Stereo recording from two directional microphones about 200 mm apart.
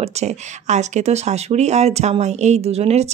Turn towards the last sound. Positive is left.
turn(degrees=-30)  # may be behind; listen again after turning